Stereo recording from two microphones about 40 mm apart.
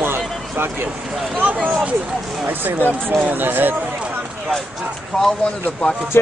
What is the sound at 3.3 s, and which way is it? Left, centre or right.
Speech, right.